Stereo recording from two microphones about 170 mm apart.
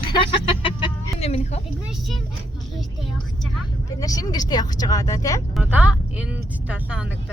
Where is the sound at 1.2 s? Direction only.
40° left (ahead or behind).